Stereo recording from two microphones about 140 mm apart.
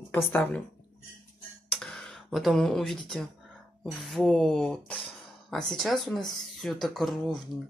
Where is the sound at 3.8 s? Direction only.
Centre (ahead or behind).